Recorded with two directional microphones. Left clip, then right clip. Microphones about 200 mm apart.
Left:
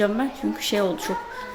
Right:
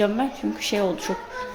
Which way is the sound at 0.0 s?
Centre (ahead or behind).